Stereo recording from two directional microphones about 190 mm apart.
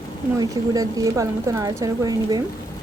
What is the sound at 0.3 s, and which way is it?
A woman's voice, 20° right (ahead or behind).